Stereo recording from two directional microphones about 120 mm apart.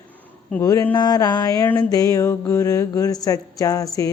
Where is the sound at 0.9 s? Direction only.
35° left (ahead or behind).